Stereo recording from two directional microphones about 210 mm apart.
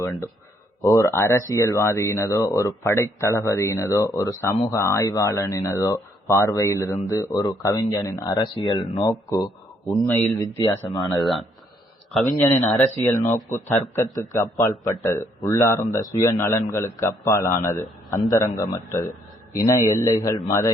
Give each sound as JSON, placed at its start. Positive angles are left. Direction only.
{"t": 0.8, "sound": "speech", "side_deg": 15}
{"t": 10.2, "sound": "speech", "side_deg": -20}
{"t": 10.8, "sound": "speech", "side_deg": 20}
{"t": 11.2, "sound": "speech", "side_deg": 0}
{"t": 12.7, "sound": "speech", "side_deg": 0}
{"t": 13.1, "sound": "speech", "side_deg": 15}